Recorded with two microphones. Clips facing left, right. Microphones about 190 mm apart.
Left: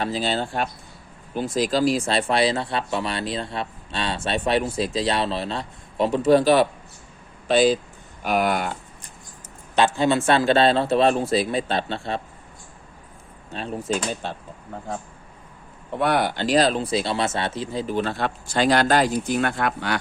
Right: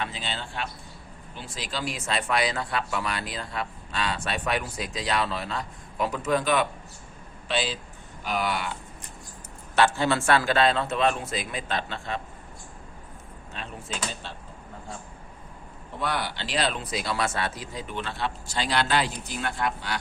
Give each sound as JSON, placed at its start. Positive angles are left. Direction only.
{"t": 0.0, "sound": "a man's voice", "side_deg": 40}
{"t": 7.4, "sound": "speech", "side_deg": 45}
{"t": 9.7, "sound": "a man's voice", "side_deg": 20}
{"t": 13.5, "sound": "speech", "side_deg": 40}
{"t": 16.0, "sound": "speech", "side_deg": 55}